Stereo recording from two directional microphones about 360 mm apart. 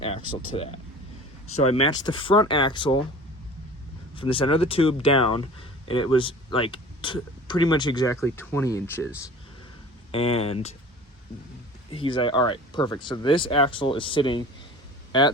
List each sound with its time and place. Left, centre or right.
0.0 s speech: centre
1.7 s speech: centre
4.1 s speech: centre
10.1 s speech: centre
11.9 s speech: centre